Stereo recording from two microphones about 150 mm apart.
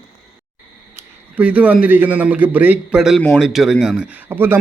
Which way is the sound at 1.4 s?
10° right (ahead or behind).